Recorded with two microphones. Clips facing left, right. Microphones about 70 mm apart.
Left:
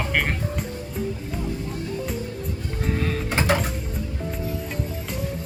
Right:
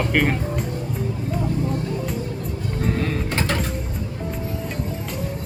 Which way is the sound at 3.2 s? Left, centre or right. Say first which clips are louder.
Left 2 dB; centre.